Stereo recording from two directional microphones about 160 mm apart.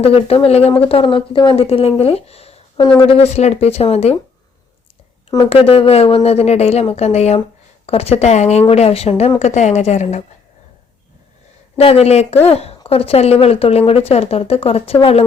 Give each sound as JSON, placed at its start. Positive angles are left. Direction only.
{"t": 0.0, "sound": "speech", "side_deg": 35}
{"t": 5.5, "sound": "a woman's voice", "side_deg": 35}
{"t": 11.8, "sound": "speech", "side_deg": 40}